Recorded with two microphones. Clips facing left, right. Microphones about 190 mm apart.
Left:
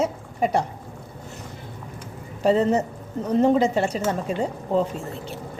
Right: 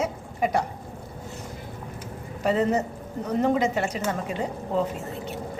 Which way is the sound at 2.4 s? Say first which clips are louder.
Left 4 dB; 30° left (ahead or behind).